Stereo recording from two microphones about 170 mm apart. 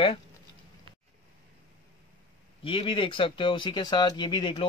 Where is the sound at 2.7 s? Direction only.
30° left (ahead or behind).